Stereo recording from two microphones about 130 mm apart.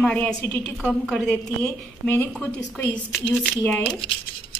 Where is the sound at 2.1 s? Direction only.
15° left (ahead or behind).